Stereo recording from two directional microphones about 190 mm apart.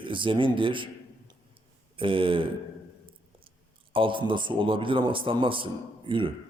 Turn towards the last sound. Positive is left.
turn(degrees=-25)  # may be behind; listen again after turning